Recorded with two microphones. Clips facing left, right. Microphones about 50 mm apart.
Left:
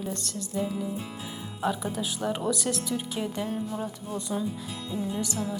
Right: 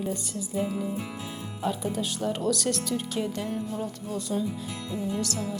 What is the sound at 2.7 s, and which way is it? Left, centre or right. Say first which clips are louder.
Speech: right 1 dB; centre.